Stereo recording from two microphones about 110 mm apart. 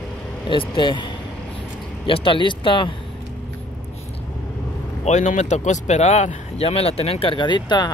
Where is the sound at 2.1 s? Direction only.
50° left (ahead or behind).